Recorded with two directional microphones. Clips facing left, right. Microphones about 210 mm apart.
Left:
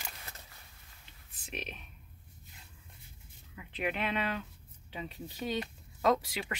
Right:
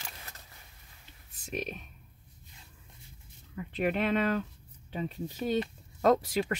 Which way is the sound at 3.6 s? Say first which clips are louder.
Right 6 dB; 45° right (ahead or behind).